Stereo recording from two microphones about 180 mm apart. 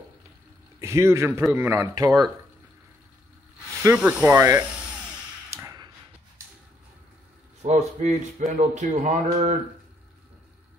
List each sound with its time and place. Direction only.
0.7 s a man's voice: 15° right (ahead or behind)
3.8 s speech: 10° right (ahead or behind)
5.5 s a sound: 15° right (ahead or behind)
7.6 s speech: 40° right (ahead or behind)